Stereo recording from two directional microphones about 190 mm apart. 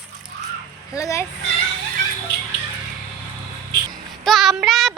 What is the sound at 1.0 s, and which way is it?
Speech, 15° left (ahead or behind).